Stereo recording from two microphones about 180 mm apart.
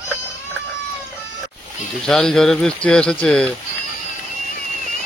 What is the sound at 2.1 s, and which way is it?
Speech, 5° left (ahead or behind).